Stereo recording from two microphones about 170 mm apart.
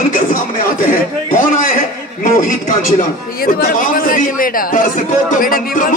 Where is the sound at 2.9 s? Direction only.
60° left (ahead or behind).